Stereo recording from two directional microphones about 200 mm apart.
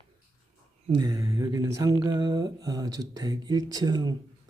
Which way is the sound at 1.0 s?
15° right (ahead or behind).